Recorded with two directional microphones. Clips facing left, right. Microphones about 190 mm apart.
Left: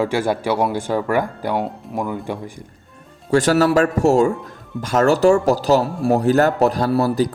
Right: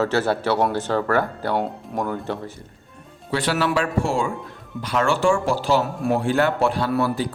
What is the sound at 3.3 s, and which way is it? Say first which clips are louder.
A man's voice: left 7 dB; 45° left (ahead or behind).